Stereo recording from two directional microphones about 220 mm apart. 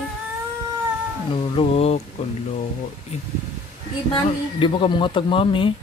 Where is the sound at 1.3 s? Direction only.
25° left (ahead or behind).